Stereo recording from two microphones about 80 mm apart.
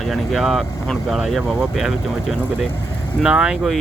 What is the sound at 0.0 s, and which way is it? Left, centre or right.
Speech, centre.